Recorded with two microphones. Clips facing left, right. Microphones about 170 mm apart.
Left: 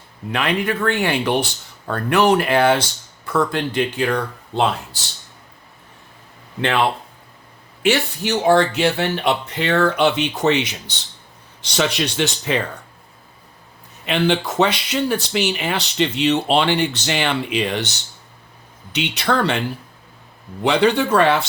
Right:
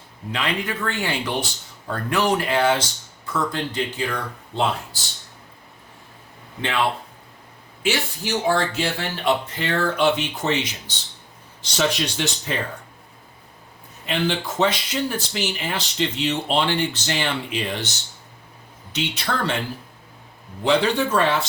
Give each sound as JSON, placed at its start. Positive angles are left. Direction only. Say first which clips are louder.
{"t": 0.3, "sound": "speech", "louder": "left 5 dB", "side_deg": 60}
{"t": 7.8, "sound": "speech", "louder": "left 6 dB", "side_deg": 65}
{"t": 14.1, "sound": "speech", "louder": "left 5 dB", "side_deg": 70}
{"t": 18.9, "sound": "speech", "louder": "left 6 dB", "side_deg": 70}
{"t": 20.7, "sound": "speech", "louder": "left 3 dB", "side_deg": 65}